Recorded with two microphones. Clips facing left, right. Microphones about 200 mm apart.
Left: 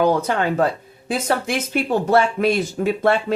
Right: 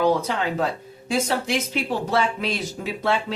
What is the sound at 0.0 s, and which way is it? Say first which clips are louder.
Speech: left 3 dB; 50° left (ahead or behind).